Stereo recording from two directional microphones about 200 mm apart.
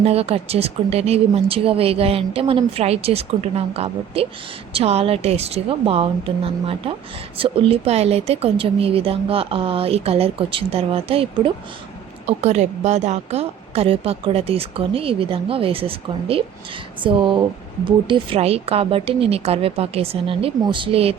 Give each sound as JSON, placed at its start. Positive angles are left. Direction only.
{"t": 0.0, "sound": "speech", "side_deg": -30}